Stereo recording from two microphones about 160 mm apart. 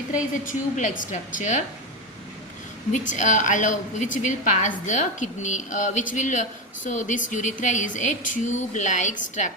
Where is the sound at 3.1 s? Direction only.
50° left (ahead or behind).